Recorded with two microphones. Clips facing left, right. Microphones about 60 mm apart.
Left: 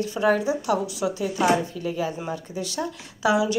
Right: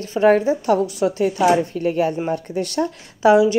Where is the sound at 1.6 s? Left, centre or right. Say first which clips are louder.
Right 8 dB; right.